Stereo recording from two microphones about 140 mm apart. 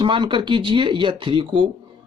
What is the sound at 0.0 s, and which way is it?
Speech, 35° right (ahead or behind).